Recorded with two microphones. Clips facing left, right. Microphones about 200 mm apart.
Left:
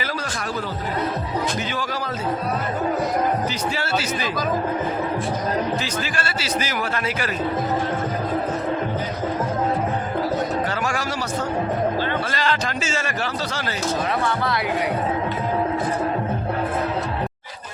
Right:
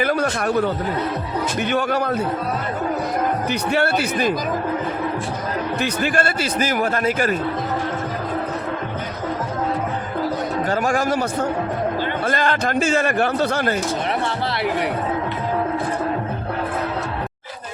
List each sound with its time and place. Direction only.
0.0 s a man's voice: 55° right (ahead or behind)
1.7 s a man's voice: 60° right (ahead or behind)
3.7 s a man's voice: 60° right (ahead or behind)
5.8 s a man's voice: 55° right (ahead or behind)
10.7 s a sound: 50° right (ahead or behind)
12.3 s a man's voice: 50° right (ahead or behind)